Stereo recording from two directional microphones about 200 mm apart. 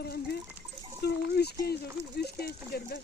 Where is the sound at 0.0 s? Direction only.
55° left (ahead or behind).